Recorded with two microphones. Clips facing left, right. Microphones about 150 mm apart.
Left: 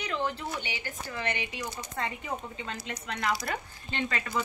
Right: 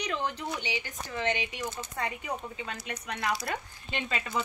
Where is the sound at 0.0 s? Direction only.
15° right (ahead or behind).